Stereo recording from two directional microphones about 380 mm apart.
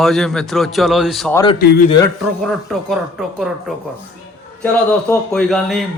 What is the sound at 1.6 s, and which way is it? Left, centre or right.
Speech, left.